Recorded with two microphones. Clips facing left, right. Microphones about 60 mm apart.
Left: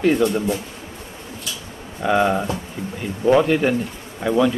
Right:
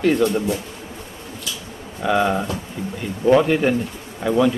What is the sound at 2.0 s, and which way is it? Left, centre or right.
Speech, centre.